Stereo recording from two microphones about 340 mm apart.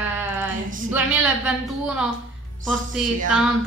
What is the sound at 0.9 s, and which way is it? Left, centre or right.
A woman's voice, centre.